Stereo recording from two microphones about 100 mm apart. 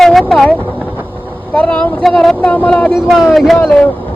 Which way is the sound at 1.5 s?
10° left (ahead or behind).